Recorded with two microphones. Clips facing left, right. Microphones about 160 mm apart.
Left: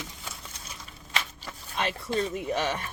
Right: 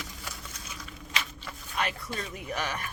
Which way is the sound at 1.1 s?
30° left (ahead or behind).